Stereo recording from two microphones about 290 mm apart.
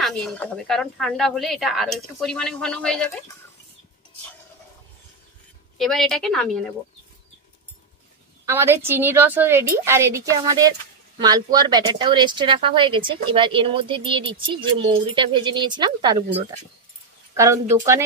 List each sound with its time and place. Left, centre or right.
0.0 s speech: centre
5.8 s speech: centre
8.5 s speech: centre
17.3 s a sound: centre